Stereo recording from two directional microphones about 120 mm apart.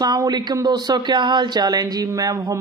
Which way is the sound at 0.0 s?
35° right (ahead or behind).